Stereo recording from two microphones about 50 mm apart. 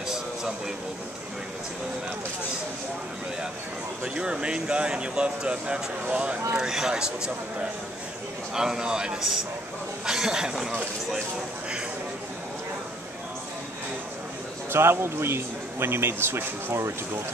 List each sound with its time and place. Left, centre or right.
4.0 s speech: right
6.5 s a man's voice: centre
8.5 s a man's voice: centre
14.7 s speech: right